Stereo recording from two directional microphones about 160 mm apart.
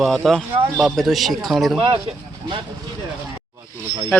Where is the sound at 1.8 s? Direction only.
35° right (ahead or behind).